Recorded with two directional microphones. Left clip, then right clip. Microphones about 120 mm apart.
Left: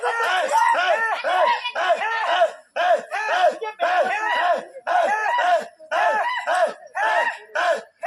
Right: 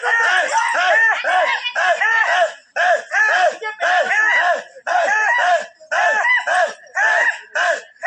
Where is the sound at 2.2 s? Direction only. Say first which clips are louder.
Right 3 dB; 25° left (ahead or behind).